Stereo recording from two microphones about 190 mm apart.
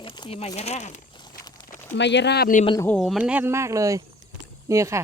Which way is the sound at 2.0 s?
65° left (ahead or behind).